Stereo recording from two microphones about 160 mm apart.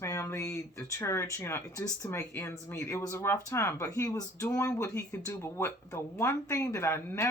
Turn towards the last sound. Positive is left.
turn(degrees=15)  # may be behind; listen again after turning